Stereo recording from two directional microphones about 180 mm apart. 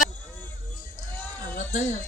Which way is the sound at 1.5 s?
50° left (ahead or behind).